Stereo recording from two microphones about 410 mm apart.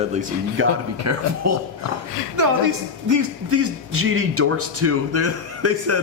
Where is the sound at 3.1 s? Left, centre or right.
Right.